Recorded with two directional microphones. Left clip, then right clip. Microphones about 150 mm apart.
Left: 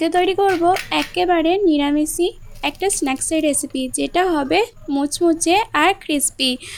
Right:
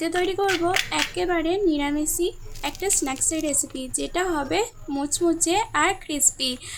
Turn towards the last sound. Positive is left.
turn(degrees=45)  # may be behind; listen again after turning